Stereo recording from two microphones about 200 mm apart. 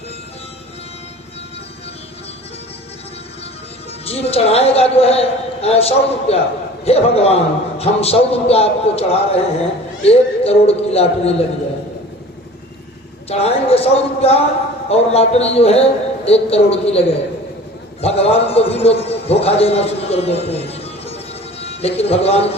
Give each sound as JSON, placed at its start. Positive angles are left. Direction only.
{"t": 4.0, "sound": "a man's voice", "side_deg": 30}
{"t": 13.2, "sound": "a man's voice", "side_deg": 30}
{"t": 18.0, "sound": "a man's voice", "side_deg": 30}